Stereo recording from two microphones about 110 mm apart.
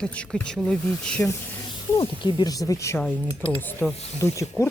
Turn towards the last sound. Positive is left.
turn(degrees=25)  # may be behind; listen again after turning